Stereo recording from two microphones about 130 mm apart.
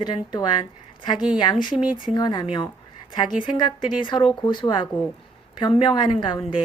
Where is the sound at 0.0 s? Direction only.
35° left (ahead or behind).